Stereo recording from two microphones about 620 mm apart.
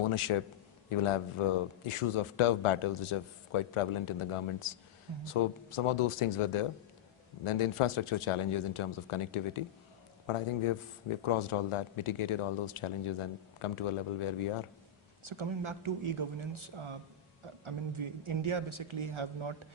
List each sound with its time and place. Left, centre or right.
0.0 s speech: left
15.2 s speech: right